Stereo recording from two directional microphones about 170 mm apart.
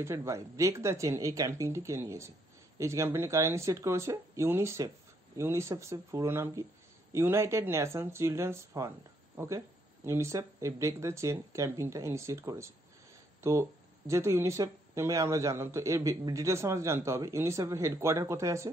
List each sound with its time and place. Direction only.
0.0 s speech: 15° right (ahead or behind)
10.0 s speech: 15° right (ahead or behind)